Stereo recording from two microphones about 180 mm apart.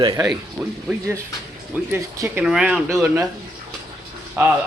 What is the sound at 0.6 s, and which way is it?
Speech, 10° right (ahead or behind).